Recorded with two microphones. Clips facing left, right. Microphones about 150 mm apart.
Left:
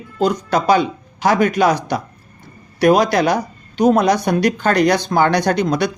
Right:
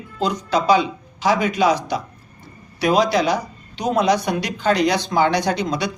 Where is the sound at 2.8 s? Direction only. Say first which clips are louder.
Left 4 dB; 55° left (ahead or behind).